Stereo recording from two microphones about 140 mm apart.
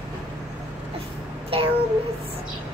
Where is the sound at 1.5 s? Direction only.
40° right (ahead or behind).